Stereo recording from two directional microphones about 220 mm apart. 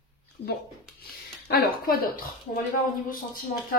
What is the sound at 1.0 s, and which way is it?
Speech, 45° left (ahead or behind).